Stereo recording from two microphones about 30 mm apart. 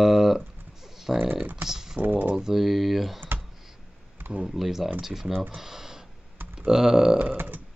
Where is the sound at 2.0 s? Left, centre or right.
Right.